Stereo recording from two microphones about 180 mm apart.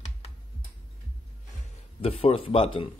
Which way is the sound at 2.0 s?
35° left (ahead or behind).